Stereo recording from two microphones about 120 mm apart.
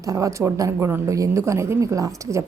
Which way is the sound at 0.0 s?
30° right (ahead or behind).